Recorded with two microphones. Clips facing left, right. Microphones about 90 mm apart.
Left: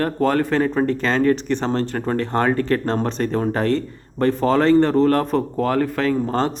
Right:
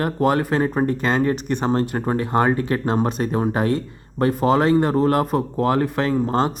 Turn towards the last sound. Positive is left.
turn(degrees=-5)  # may be behind; listen again after turning